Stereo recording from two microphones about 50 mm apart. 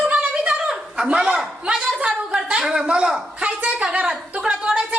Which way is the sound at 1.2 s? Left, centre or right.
Centre.